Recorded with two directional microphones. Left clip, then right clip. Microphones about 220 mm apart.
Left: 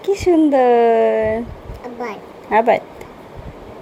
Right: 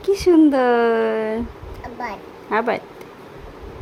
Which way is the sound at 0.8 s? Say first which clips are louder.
Left 5 dB; 50° right (ahead or behind).